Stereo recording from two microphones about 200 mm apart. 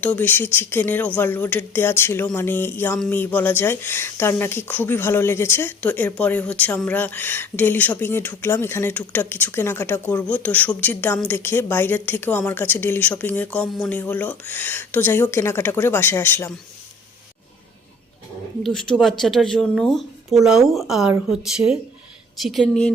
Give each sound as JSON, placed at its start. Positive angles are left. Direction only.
{"t": 0.0, "sound": "speech", "side_deg": 10}
{"t": 18.6, "sound": "speech", "side_deg": 0}